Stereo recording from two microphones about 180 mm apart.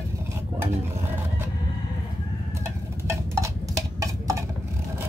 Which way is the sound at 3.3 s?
20° right (ahead or behind).